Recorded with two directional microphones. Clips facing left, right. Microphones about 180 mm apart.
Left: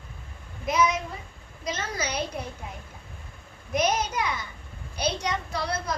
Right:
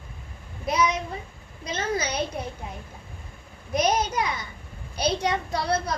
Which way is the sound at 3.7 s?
30° right (ahead or behind).